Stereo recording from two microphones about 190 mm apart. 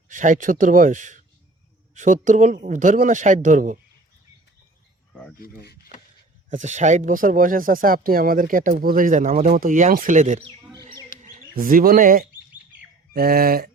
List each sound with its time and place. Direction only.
0.1 s speech: 40° right (ahead or behind)
2.2 s speech: 40° right (ahead or behind)
6.5 s speech: 40° right (ahead or behind)
11.1 s bird: 50° left (ahead or behind)
11.5 s speech: 50° right (ahead or behind)